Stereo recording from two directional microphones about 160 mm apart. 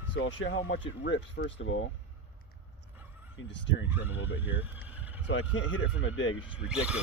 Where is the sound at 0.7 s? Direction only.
90° left.